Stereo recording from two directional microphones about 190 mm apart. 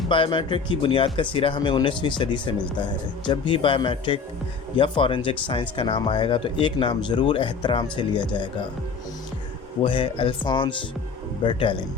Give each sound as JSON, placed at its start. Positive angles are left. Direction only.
{"t": 0.1, "sound": "speech", "side_deg": 25}
{"t": 9.8, "sound": "speech", "side_deg": 25}